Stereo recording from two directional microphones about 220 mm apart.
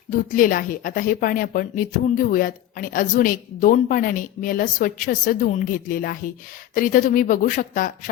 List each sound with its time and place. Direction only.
0.1 s a woman's voice: 40° left (ahead or behind)